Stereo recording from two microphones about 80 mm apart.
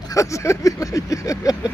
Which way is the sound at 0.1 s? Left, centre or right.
Left.